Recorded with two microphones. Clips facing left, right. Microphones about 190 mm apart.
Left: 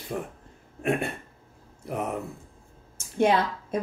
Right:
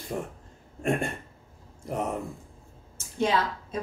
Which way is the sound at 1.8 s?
5° left (ahead or behind).